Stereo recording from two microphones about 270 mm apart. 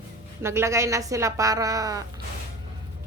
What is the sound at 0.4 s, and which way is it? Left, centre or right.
A woman's voice, centre.